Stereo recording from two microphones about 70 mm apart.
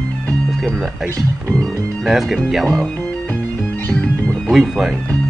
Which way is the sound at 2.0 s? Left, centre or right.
Centre.